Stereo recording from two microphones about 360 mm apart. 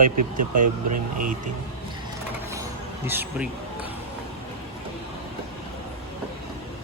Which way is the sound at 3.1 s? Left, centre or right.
Centre.